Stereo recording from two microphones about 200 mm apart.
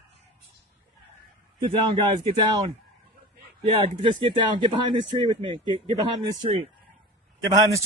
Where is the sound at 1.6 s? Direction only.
20° right (ahead or behind).